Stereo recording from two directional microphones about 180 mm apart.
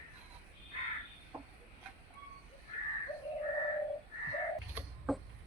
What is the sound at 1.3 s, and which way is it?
Chicken, 15° right (ahead or behind).